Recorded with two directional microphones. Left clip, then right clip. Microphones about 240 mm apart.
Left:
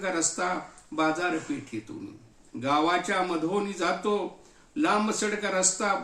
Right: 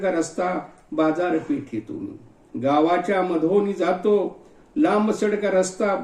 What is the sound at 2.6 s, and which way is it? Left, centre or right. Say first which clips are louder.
Speech: right 5 dB; centre.